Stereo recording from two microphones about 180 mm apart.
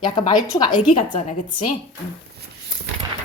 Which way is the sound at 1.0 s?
40° left (ahead or behind).